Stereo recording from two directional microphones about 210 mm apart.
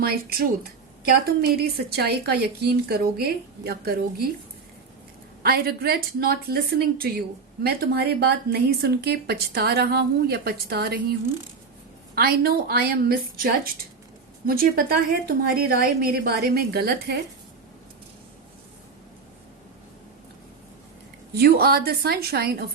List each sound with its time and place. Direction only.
0.0 s a woman's voice: 45° right (ahead or behind)
5.4 s a woman's voice: 45° right (ahead or behind)
12.1 s a woman's voice: 45° right (ahead or behind)
21.3 s a woman's voice: 50° right (ahead or behind)